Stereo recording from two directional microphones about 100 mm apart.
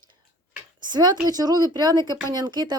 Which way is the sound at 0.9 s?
45° right (ahead or behind).